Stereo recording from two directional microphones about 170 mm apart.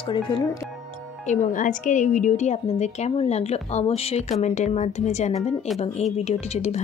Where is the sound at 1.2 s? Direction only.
50° left (ahead or behind).